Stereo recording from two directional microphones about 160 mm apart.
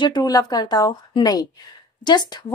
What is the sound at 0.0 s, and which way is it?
A woman's voice, 25° left (ahead or behind).